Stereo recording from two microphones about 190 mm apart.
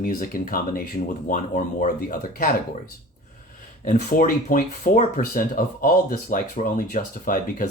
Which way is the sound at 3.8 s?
40° left (ahead or behind).